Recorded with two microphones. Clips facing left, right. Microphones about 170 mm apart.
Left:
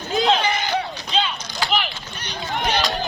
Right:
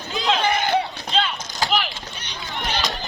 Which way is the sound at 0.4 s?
55° right (ahead or behind).